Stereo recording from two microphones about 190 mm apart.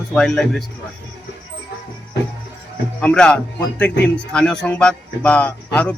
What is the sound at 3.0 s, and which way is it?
Speech, 5° left (ahead or behind).